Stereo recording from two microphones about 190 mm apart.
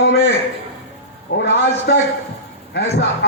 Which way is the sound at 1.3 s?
50° left (ahead or behind).